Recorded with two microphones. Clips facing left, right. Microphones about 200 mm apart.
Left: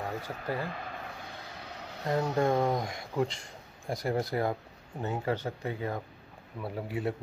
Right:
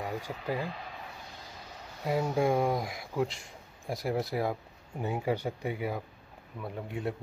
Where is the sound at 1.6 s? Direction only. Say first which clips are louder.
Left 3 dB; 65° left (ahead or behind).